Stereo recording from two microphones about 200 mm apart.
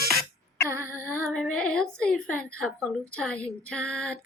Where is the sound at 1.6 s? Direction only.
5° left (ahead or behind).